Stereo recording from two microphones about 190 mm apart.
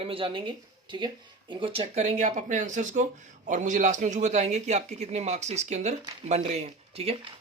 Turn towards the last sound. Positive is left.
turn(degrees=-30)  # may be behind; listen again after turning